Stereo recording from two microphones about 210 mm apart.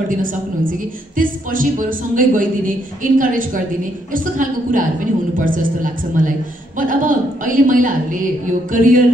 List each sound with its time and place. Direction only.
0.2 s a woman's voice: 40° right (ahead or behind)